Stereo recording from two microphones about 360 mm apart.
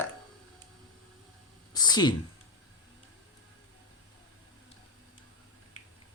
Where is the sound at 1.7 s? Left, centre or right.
Centre.